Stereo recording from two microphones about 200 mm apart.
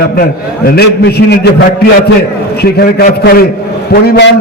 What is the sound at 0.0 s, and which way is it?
A man's voice, 50° left (ahead or behind).